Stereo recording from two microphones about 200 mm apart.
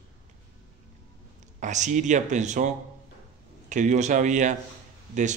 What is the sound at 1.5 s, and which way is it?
A man's voice, 35° right (ahead or behind).